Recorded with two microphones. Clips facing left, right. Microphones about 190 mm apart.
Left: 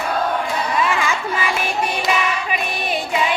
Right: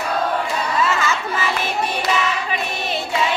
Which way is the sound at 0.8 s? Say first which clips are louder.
Even; 10° left (ahead or behind).